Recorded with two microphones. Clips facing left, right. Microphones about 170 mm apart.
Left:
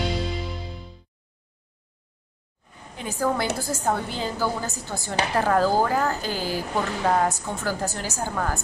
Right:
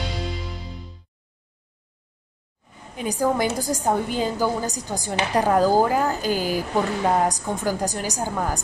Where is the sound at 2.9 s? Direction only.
15° right (ahead or behind).